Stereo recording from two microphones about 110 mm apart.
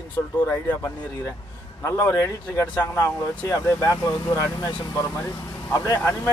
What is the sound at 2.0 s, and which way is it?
Speech, 25° left (ahead or behind).